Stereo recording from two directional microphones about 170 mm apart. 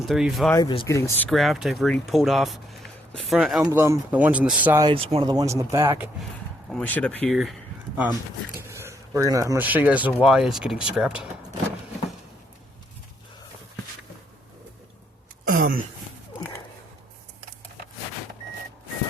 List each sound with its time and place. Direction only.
0.1 s speech: centre (ahead or behind)
0.5 s speech: 25° left (ahead or behind)
1.3 s speech: centre (ahead or behind)
3.6 s speech: 15° right (ahead or behind)
4.8 s speech: 30° right (ahead or behind)
6.7 s speech: 10° left (ahead or behind)
8.5 s speech: 15° right (ahead or behind)
15.4 s a sound: 55° right (ahead or behind)